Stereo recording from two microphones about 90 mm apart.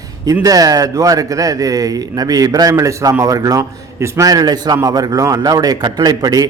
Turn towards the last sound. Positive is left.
turn(degrees=-45)  # may be behind; listen again after turning